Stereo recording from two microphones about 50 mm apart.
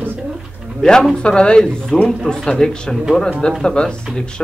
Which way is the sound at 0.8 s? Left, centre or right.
Centre.